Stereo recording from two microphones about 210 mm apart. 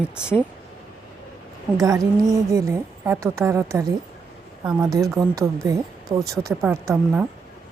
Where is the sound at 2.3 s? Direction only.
15° right (ahead or behind).